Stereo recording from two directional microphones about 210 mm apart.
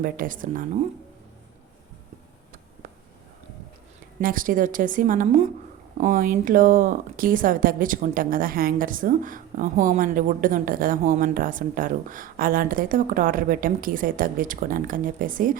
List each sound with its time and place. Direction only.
0.0 s speech: 40° right (ahead or behind)
4.2 s speech: 40° right (ahead or behind)